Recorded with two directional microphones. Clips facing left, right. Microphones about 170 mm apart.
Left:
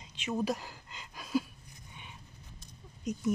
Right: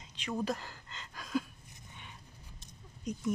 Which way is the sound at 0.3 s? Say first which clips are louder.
Left 2 dB; 15° left (ahead or behind).